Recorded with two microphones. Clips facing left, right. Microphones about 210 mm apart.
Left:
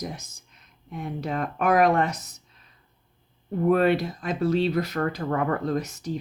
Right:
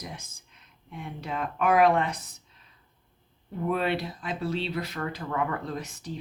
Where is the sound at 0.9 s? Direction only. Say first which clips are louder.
Left 6 dB; 40° left (ahead or behind).